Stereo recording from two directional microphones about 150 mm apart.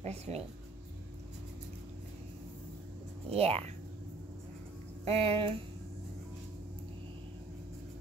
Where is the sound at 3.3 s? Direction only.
40° right (ahead or behind).